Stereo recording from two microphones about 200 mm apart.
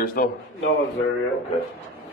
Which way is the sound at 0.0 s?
45° left (ahead or behind).